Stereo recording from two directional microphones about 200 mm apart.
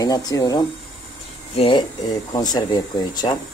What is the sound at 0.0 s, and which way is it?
Speech, 20° left (ahead or behind).